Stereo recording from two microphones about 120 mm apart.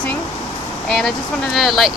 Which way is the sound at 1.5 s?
Centre (ahead or behind).